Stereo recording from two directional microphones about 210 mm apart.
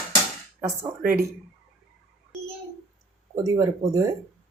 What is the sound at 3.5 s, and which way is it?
Speech, 15° right (ahead or behind).